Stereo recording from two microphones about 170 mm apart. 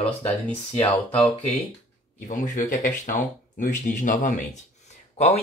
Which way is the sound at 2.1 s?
50° left (ahead or behind).